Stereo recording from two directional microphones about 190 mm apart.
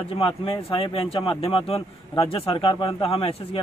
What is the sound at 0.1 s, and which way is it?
A man's voice, 30° left (ahead or behind).